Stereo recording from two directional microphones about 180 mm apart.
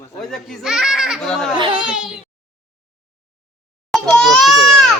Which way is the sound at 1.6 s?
25° right (ahead or behind).